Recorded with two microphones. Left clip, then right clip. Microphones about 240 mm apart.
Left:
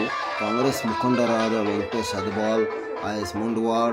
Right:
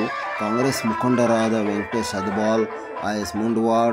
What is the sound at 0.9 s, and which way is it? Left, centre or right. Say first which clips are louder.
Speech: right 2 dB; right.